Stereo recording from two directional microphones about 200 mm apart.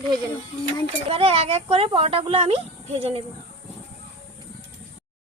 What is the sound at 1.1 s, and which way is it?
Speech, 25° right (ahead or behind).